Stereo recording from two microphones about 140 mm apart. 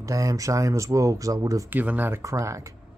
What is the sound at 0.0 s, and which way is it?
Speech, 25° right (ahead or behind).